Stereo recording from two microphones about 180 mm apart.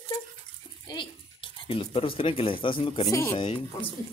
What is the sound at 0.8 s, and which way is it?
Speech, 25° left (ahead or behind).